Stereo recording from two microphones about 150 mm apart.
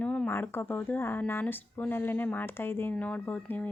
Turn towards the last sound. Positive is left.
turn(degrees=10)  # may be behind; listen again after turning